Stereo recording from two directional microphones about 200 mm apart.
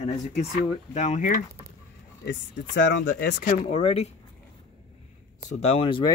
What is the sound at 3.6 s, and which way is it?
Speech, 30° left (ahead or behind).